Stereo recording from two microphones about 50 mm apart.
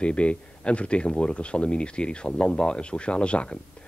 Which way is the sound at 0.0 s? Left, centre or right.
Left.